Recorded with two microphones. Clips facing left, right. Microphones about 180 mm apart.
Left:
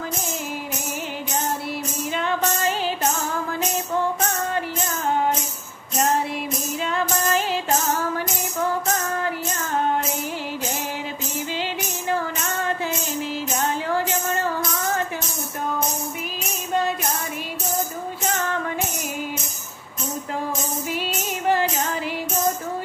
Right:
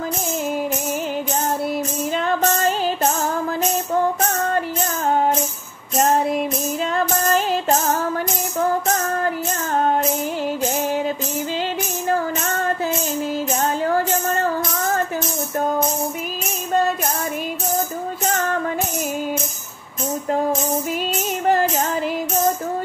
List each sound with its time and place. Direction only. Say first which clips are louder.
2.1 s music: right 4 dB; 45° right (ahead or behind)
6.3 s music: right 6 dB; 40° right (ahead or behind)
13.6 s music: right 3 dB; 45° right (ahead or behind)
21.5 s music: right 3 dB; 40° right (ahead or behind)